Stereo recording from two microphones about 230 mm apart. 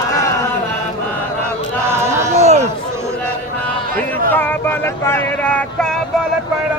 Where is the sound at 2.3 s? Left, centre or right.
Right.